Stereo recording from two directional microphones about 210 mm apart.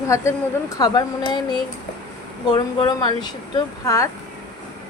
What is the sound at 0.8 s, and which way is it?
Speech, 20° left (ahead or behind).